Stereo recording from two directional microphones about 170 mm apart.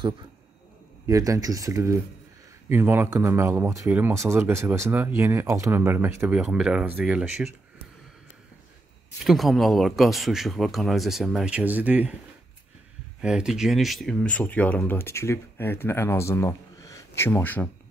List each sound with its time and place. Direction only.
1.0 s speech: 20° right (ahead or behind)
9.2 s speech: centre (ahead or behind)
13.2 s speech: 5° right (ahead or behind)